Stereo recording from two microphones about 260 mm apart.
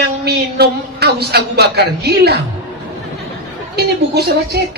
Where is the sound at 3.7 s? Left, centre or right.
Right.